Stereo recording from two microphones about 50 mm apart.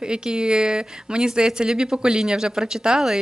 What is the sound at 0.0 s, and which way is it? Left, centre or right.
A woman's voice, centre.